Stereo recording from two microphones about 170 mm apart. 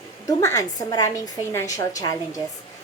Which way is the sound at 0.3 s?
20° left (ahead or behind).